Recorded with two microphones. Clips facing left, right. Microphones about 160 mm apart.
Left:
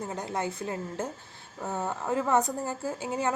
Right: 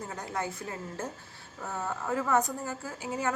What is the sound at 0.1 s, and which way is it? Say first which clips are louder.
A woman's voice: left 1 dB; 25° left (ahead or behind).